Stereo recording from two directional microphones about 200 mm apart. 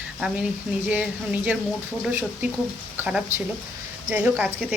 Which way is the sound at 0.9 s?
5° right (ahead or behind).